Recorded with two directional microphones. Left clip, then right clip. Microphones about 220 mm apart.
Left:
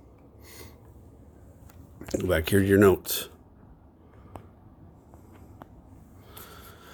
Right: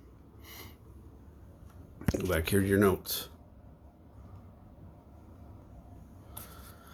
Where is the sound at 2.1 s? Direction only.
20° left (ahead or behind); by 3.3 s 40° left (ahead or behind).